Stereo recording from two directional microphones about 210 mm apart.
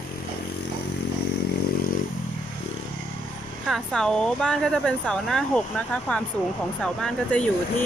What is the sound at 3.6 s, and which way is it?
Speech, centre (ahead or behind).